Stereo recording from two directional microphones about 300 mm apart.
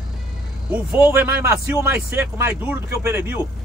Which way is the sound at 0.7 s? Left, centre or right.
Centre.